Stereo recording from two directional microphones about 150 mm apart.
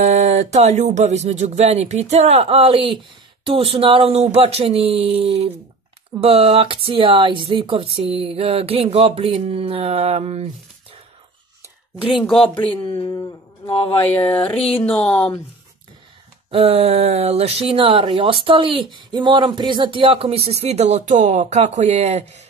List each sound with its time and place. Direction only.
0.0 s speech: 50° right (ahead or behind)
12.1 s speech: centre (ahead or behind)
12.5 s speech: 35° left (ahead or behind)
14.1 s a sound: 10° left (ahead or behind)
14.9 s speech: 5° left (ahead or behind)
16.4 s speech: 45° right (ahead or behind)